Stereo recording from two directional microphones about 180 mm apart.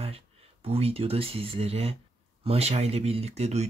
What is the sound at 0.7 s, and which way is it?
Speech, 35° right (ahead or behind).